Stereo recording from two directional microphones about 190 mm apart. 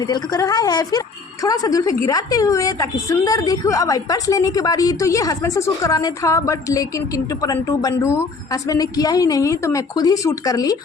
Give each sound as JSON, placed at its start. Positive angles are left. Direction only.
{"t": 0.0, "sound": "a woman's voice", "side_deg": 20}